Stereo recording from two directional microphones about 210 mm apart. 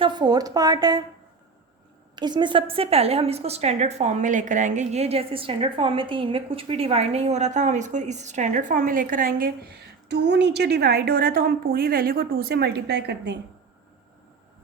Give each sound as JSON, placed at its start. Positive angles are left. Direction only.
{"t": 0.0, "sound": "a woman's voice", "side_deg": -20}
{"t": 2.1, "sound": "a woman's voice", "side_deg": -20}